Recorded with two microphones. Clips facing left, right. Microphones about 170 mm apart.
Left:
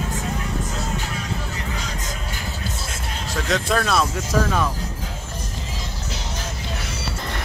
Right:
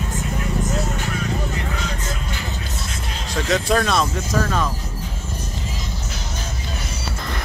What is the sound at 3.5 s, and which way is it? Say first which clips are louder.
Speech: right 2 dB; centre (ahead or behind).